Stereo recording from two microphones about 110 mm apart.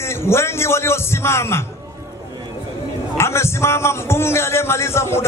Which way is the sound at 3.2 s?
25° left (ahead or behind).